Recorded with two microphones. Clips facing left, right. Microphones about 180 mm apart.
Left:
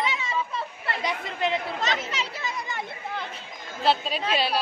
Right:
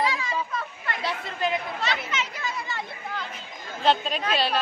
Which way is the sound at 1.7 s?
40° left (ahead or behind).